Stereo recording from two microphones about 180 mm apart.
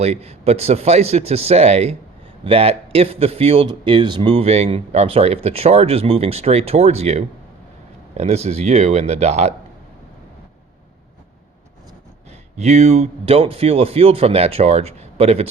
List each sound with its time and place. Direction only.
0.0 s a man's voice: 35° right (ahead or behind)
12.5 s a man's voice: 40° right (ahead or behind)